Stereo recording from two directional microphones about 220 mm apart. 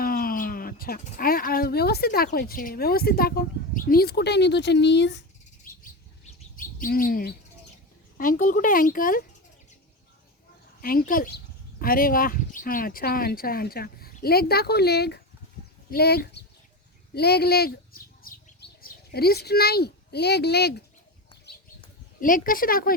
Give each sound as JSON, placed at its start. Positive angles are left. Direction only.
{"t": 0.0, "sound": "speech", "side_deg": 40}
{"t": 5.7, "sound": "chirp", "side_deg": 40}
{"t": 6.6, "sound": "speech", "side_deg": 40}
{"t": 10.8, "sound": "speech", "side_deg": 40}
{"t": 22.2, "sound": "speech", "side_deg": 40}